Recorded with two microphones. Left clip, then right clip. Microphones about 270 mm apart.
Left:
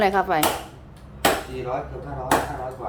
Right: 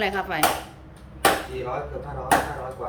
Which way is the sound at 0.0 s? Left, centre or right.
Centre.